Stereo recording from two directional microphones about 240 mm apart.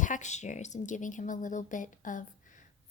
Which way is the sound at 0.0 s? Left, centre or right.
Left.